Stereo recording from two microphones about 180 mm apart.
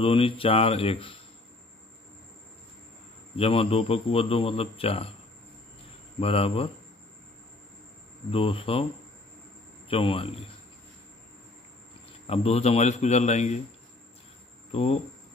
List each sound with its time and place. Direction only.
0.0 s a man's voice: 30° left (ahead or behind)
3.3 s a man's voice: 30° left (ahead or behind)
6.1 s a man's voice: 30° left (ahead or behind)
8.3 s a man's voice: 30° left (ahead or behind)
9.8 s speech: 30° left (ahead or behind)
12.3 s a man's voice: 35° left (ahead or behind)
14.7 s speech: 35° left (ahead or behind)